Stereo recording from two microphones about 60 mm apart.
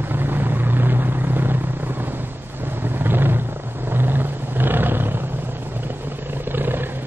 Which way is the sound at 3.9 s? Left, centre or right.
Right.